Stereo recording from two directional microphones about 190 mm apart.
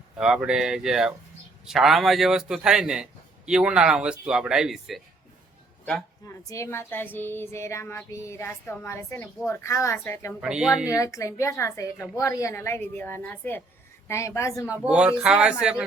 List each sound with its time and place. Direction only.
0.2 s a man's voice: 5° right (ahead or behind)
6.2 s speech: 15° left (ahead or behind)
10.4 s a man's voice: 5° right (ahead or behind)
10.8 s speech: 15° left (ahead or behind)
14.7 s a man's voice: 5° right (ahead or behind)